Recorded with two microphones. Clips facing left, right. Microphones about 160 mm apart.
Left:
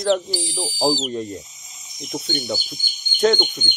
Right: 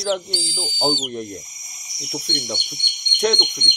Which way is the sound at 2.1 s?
5° left (ahead or behind).